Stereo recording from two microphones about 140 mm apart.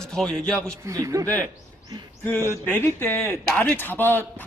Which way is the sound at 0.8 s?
20° right (ahead or behind).